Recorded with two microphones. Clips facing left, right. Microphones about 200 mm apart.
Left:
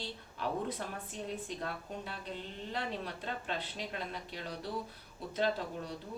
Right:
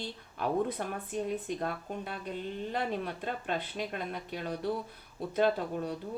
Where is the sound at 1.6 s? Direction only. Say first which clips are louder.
Right 5 dB; 55° right (ahead or behind).